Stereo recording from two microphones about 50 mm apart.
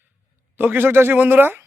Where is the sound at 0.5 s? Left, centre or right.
Right.